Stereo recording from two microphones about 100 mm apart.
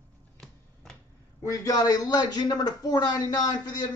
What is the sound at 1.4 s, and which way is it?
A man's voice, 35° left (ahead or behind).